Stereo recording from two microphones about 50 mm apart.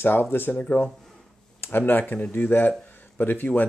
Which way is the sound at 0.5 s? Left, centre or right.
Left.